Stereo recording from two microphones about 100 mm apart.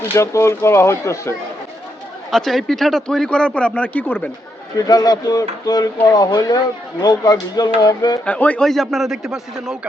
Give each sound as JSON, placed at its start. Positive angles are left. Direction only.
{"t": 0.2, "sound": "speech", "side_deg": 30}
{"t": 2.3, "sound": "a man's voice", "side_deg": 5}
{"t": 4.9, "sound": "speech", "side_deg": 40}
{"t": 8.2, "sound": "a man's voice", "side_deg": 15}